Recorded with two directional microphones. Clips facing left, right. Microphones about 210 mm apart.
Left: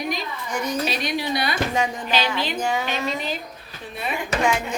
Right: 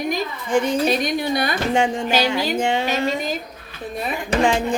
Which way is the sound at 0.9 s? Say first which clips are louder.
Right 5 dB; 50° right (ahead or behind).